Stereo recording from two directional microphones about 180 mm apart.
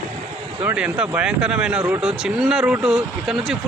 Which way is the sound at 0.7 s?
5° right (ahead or behind).